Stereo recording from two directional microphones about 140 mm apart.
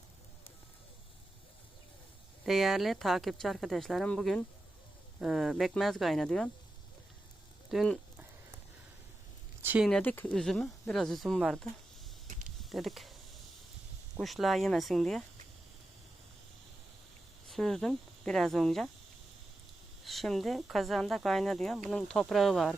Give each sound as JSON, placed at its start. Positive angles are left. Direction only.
{"t": 2.5, "sound": "speech", "side_deg": 0}
{"t": 7.7, "sound": "speech", "side_deg": 0}
{"t": 9.6, "sound": "a sound", "side_deg": -15}
{"t": 10.0, "sound": "speech", "side_deg": 10}
{"t": 12.3, "sound": "a sound", "side_deg": -65}
{"t": 12.5, "sound": "a sound", "side_deg": 0}
{"t": 14.2, "sound": "speech", "side_deg": 0}
{"t": 17.5, "sound": "speech", "side_deg": 0}
{"t": 20.1, "sound": "speech", "side_deg": 0}